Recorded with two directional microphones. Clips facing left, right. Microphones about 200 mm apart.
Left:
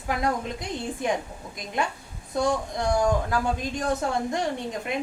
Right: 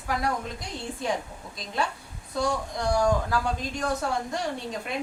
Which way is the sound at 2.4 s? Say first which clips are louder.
Left 2 dB; 20° left (ahead or behind).